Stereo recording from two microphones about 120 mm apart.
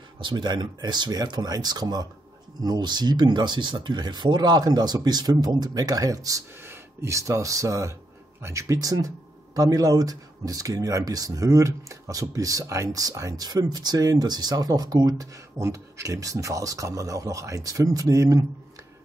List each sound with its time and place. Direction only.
0.2 s speech: 40° right (ahead or behind)